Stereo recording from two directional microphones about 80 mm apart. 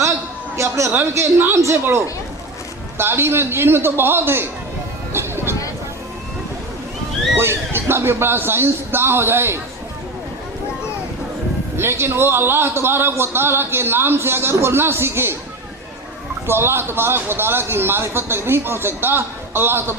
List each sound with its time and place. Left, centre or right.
0.5 s a man's voice: right
5.1 s music: right
7.3 s speech: right
11.8 s a man's voice: right
16.5 s a man's voice: right